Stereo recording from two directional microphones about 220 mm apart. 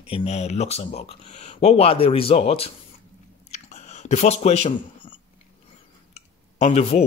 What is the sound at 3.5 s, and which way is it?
Chewing, 30° left (ahead or behind).